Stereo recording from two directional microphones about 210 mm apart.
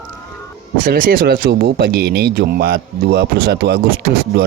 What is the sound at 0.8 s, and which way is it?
Speech, 45° right (ahead or behind).